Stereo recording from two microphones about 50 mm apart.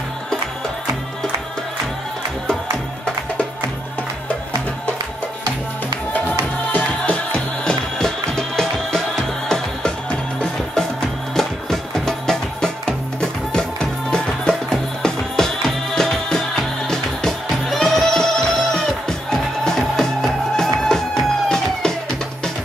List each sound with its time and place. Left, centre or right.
6.7 s music: left
7.3 s music: centre